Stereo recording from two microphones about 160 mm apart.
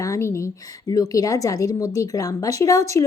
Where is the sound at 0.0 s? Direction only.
20° left (ahead or behind).